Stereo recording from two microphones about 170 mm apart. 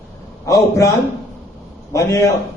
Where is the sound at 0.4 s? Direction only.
20° left (ahead or behind).